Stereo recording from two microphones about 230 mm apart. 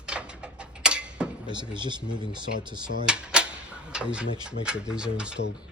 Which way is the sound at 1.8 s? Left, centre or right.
Centre.